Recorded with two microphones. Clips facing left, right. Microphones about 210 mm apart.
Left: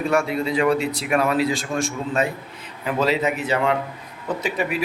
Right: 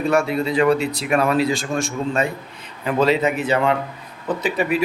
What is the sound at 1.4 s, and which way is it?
Speech, centre (ahead or behind).